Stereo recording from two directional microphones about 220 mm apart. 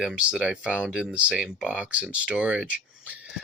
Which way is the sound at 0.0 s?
5° right (ahead or behind).